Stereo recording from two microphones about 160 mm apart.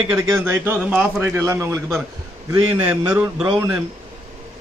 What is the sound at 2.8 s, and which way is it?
Speech, 10° right (ahead or behind).